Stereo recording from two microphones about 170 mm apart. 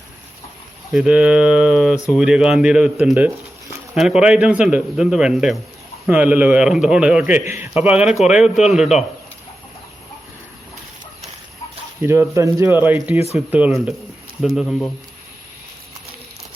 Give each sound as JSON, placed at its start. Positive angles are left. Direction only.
{"t": 0.9, "sound": "a man's voice", "side_deg": -5}
{"t": 12.0, "sound": "a man's voice", "side_deg": -15}
{"t": 13.1, "sound": "speech", "side_deg": 35}
{"t": 13.5, "sound": "a man's voice", "side_deg": -5}